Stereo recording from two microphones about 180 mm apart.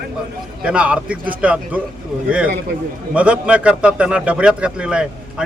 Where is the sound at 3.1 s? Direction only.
5° right (ahead or behind).